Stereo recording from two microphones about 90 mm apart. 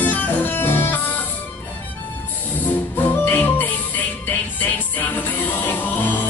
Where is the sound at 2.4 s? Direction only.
20° left (ahead or behind).